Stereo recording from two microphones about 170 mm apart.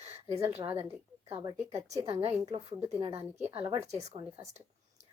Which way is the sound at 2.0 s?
35° right (ahead or behind).